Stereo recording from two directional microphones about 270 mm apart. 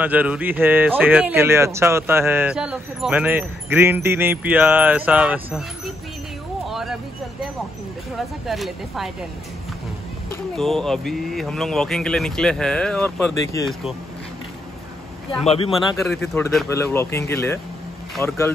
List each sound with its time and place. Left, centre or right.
0.0 s speech: centre
6.7 s a sound: centre
8.2 s speech: centre
10.3 s speech: centre
15.4 s speech: left
16.1 s speech: centre